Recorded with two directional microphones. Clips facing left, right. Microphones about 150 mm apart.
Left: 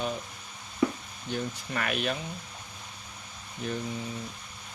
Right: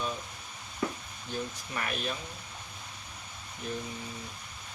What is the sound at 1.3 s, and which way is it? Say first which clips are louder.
Speech: left 4 dB; 80° left.